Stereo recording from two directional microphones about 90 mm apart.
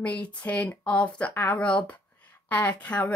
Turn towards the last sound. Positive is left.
turn(degrees=15)  # may be behind; listen again after turning